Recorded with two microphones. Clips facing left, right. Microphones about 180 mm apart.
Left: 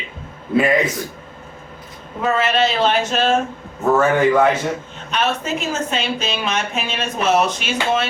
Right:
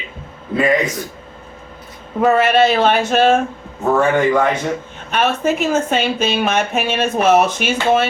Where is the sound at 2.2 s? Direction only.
55° right (ahead or behind).